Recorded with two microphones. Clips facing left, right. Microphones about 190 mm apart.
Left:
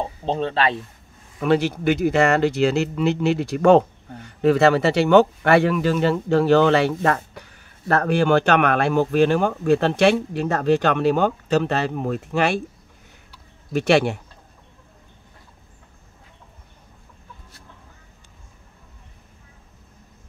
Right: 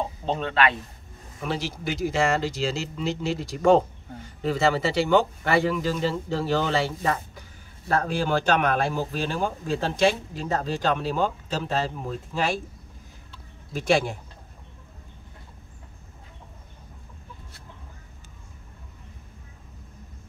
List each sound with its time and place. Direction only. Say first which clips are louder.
0.2 s speech: left 2 dB; 30° left (ahead or behind)
1.4 s speech: left 11 dB; 60° left (ahead or behind)
13.7 s speech: left 5 dB; 70° left (ahead or behind)